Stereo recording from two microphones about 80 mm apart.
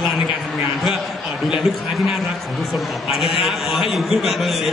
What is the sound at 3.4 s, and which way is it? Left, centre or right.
A woman's voice, centre.